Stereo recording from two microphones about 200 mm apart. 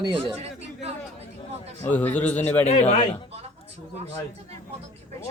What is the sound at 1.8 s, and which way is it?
Speech, 10° left (ahead or behind).